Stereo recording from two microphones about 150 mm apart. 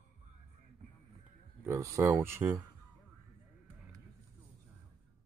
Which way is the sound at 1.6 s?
20° right (ahead or behind).